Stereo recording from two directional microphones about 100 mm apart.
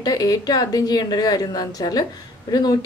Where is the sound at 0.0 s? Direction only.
40° left (ahead or behind).